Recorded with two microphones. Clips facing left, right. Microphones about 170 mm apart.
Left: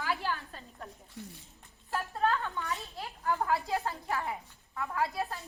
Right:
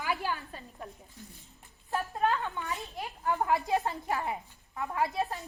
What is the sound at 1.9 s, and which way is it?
A woman's voice, 15° right (ahead or behind).